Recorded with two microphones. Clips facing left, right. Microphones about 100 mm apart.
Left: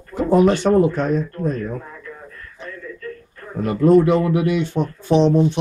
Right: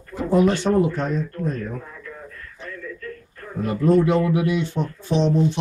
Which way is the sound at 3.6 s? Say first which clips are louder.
Left 4 dB; 60° left (ahead or behind).